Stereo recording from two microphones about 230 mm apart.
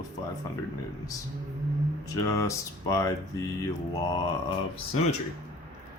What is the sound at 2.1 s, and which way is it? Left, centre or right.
Speech, centre.